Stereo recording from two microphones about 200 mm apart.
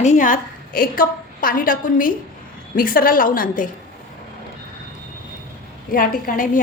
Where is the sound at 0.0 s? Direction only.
40° left (ahead or behind).